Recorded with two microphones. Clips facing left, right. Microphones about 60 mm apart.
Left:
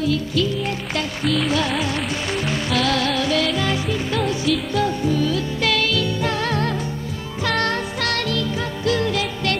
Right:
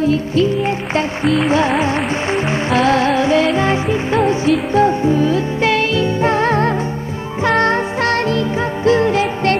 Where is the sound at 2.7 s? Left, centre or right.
Right.